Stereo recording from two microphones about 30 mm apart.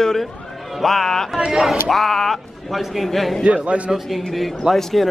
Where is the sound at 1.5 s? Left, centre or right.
Centre.